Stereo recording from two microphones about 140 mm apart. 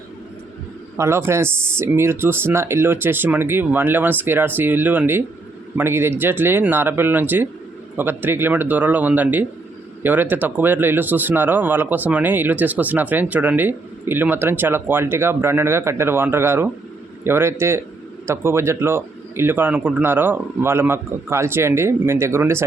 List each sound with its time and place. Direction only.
0.9 s speech: 20° right (ahead or behind)